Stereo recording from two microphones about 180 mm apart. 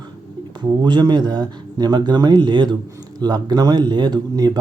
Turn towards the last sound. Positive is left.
turn(degrees=-25)  # may be behind; listen again after turning